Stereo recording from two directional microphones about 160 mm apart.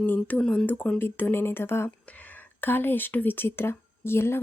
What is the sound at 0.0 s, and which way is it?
Speech, 10° left (ahead or behind).